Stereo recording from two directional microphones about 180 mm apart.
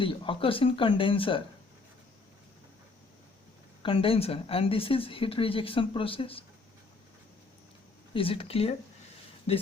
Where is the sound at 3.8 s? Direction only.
30° left (ahead or behind).